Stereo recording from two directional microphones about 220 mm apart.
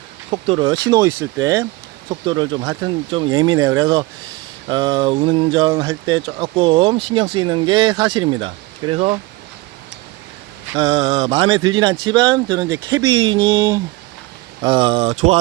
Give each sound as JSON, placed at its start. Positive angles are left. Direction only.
{"t": 0.3, "sound": "speech", "side_deg": -25}
{"t": 10.8, "sound": "speech", "side_deg": -25}